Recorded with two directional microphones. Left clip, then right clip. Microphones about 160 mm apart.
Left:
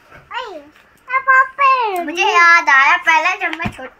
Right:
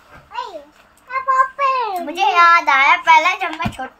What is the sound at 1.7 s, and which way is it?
Speech, 25° left (ahead or behind).